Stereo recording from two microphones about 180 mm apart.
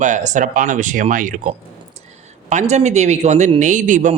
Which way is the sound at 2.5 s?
40° right (ahead or behind).